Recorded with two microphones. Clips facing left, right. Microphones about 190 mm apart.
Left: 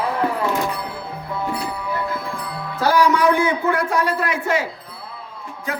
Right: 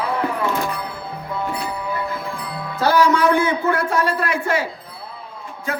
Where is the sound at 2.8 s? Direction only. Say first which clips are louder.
Right 1 dB; 15° left (ahead or behind).